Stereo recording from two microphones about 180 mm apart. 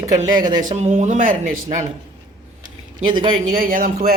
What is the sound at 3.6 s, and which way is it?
Speech, 50° right (ahead or behind).